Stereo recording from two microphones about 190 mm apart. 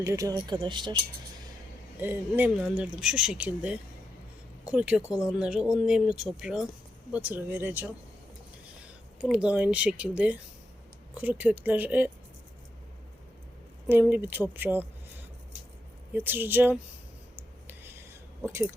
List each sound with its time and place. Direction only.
0.0 s speech: 15° right (ahead or behind)
2.0 s speech: 10° right (ahead or behind)
5.0 s speech: 15° left (ahead or behind)
5.3 s speech: 5° right (ahead or behind)
9.2 s speech: 5° right (ahead or behind)
13.8 s speech: 10° right (ahead or behind)
16.1 s speech: 10° right (ahead or behind)
17.7 s whispering: 10° right (ahead or behind)
18.4 s speech: 15° right (ahead or behind)